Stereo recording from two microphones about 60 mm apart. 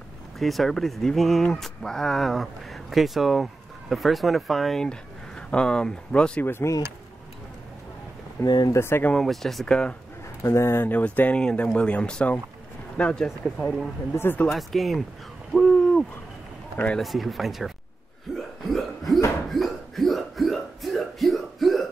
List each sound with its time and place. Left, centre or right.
0.4 s speech: centre
5.5 s speech: centre
6.4 s speech: left
8.4 s speech: left
9.2 s speech: centre
9.7 s speech: centre
10.4 s speech: left
10.9 s speech: left; by 15.0 s centre
15.5 s hoot: centre
16.7 s speech: left
17.0 s speech: centre
18.6 s hiccup: centre